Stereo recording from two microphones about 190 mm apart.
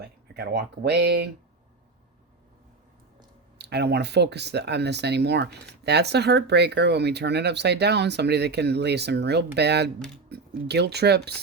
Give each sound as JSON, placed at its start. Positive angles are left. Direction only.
{"t": 0.3, "sound": "speech", "side_deg": -60}
{"t": 3.6, "sound": "speech", "side_deg": -60}